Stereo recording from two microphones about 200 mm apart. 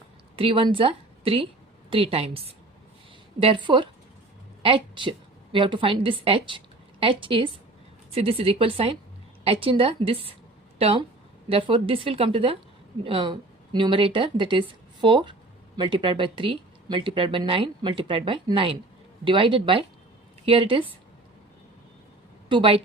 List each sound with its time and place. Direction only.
0.3 s speech: 25° right (ahead or behind)
3.4 s a woman's voice: 25° right (ahead or behind)
22.4 s speech: 25° right (ahead or behind)